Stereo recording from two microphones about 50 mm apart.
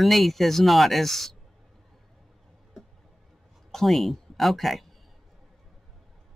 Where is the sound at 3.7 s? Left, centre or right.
Centre.